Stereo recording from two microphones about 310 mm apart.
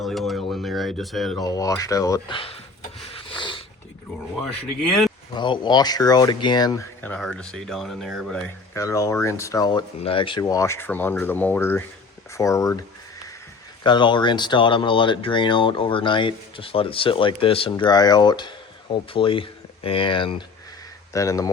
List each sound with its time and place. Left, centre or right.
0.0 s a sound: centre
1.5 s speech: centre
3.2 s a sound: centre
4.8 s speech: centre
5.3 s speech: centre
13.8 s speech: centre